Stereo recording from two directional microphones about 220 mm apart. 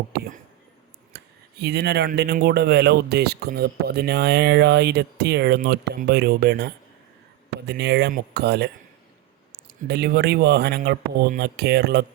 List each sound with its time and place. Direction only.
0.1 s speech: 45° right (ahead or behind)
7.7 s speech: 50° right (ahead or behind)